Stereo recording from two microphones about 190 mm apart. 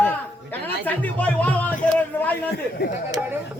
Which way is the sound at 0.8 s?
10° left (ahead or behind).